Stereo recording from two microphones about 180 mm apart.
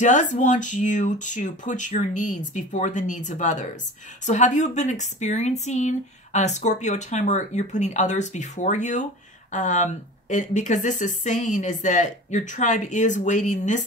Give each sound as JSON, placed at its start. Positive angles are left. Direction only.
{"t": 0.0, "sound": "speech", "side_deg": 45}